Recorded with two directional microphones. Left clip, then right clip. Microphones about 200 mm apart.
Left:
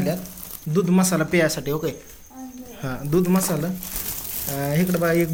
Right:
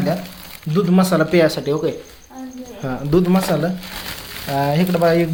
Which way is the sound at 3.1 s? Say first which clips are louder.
Right 5 dB; 10° right (ahead or behind).